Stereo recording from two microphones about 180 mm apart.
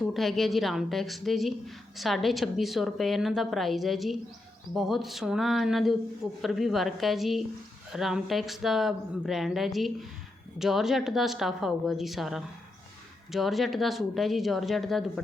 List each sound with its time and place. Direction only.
0.1 s a woman's voice: centre (ahead or behind)